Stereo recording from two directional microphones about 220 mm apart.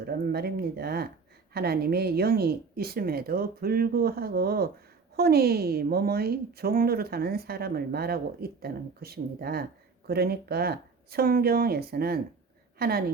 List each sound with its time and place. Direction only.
0.0 s a woman's voice: 45° right (ahead or behind)